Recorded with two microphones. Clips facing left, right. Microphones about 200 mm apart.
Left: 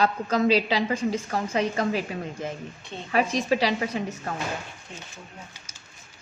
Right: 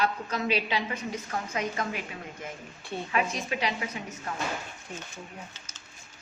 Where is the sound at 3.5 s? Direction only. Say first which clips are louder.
Left 8 dB; 35° left (ahead or behind).